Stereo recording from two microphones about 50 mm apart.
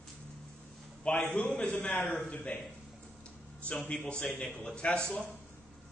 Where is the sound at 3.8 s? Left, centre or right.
Centre.